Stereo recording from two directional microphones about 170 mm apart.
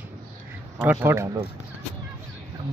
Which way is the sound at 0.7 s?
10° right (ahead or behind).